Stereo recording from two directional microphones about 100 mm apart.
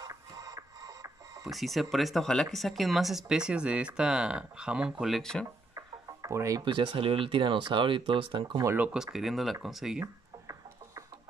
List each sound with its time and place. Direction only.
0.0 s music: 35° right (ahead or behind)
1.5 s speech: centre (ahead or behind)
5.8 s music: 35° right (ahead or behind)
6.6 s speech: 50° right (ahead or behind)
8.7 s speech: 10° right (ahead or behind)
10.4 s ratchet: 35° right (ahead or behind)